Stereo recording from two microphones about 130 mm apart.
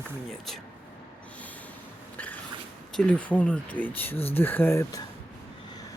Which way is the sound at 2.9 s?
10° left (ahead or behind).